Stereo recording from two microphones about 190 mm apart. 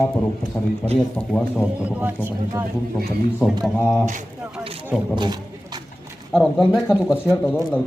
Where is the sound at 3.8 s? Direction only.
5° left (ahead or behind).